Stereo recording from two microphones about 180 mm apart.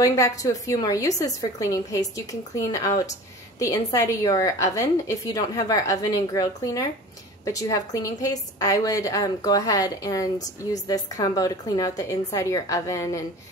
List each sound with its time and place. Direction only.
0.0 s a woman's voice: 20° left (ahead or behind)